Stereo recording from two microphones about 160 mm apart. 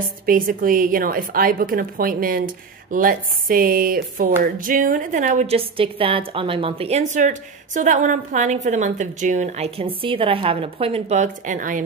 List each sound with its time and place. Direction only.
0.3 s a woman's voice: 60° right (ahead or behind)
5.5 s a woman's voice: 35° right (ahead or behind); by 11.8 s 55° right (ahead or behind)